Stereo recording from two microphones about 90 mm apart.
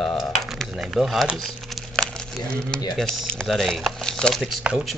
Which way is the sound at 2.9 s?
10° left (ahead or behind).